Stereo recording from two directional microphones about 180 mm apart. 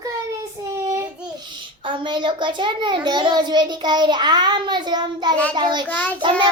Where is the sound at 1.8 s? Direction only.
25° right (ahead or behind).